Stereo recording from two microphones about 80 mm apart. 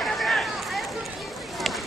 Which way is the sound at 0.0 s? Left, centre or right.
Centre.